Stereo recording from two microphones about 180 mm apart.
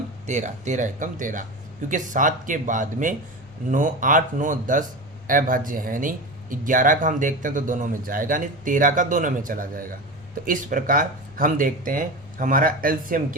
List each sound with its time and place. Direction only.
0.3 s speech: 40° right (ahead or behind)